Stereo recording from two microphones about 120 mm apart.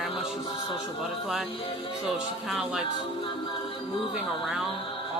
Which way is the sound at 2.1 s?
5° right (ahead or behind).